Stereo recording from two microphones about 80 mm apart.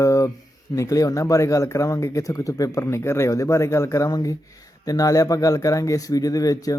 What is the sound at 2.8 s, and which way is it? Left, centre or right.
Speech, left.